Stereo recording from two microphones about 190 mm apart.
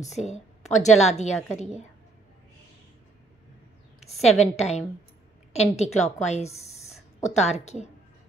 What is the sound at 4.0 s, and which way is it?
A woman's voice, 35° left (ahead or behind).